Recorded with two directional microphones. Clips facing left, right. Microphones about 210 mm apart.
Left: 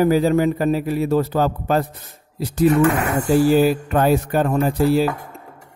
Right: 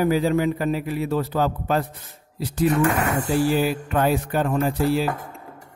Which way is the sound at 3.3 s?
45° left (ahead or behind).